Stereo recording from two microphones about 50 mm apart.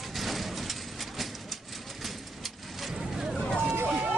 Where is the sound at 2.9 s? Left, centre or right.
Centre.